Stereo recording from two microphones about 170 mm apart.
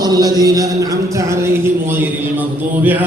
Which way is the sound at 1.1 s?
15° right (ahead or behind).